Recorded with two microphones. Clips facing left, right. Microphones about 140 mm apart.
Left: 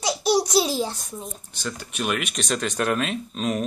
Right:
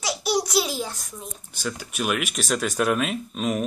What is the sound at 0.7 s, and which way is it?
Speech, 20° left (ahead or behind).